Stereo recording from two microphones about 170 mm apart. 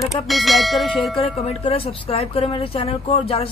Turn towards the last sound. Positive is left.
turn(degrees=35)  # may be behind; listen again after turning